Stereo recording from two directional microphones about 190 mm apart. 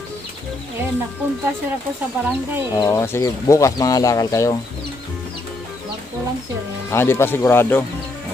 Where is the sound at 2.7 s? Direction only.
15° left (ahead or behind).